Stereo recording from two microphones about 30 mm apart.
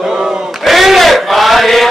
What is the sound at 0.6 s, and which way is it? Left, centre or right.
Battle cry, centre.